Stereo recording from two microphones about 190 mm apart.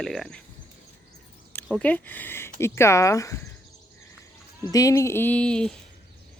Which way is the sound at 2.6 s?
15° left (ahead or behind).